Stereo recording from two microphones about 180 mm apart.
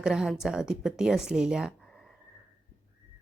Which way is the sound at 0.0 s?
5° right (ahead or behind).